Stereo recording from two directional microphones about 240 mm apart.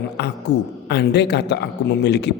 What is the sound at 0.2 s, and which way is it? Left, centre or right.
A man's voice, left.